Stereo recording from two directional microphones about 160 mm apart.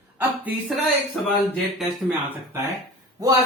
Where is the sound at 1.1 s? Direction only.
Centre (ahead or behind).